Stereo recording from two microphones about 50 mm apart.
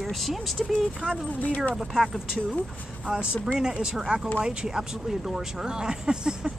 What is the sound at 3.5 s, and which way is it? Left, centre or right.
Speech, centre.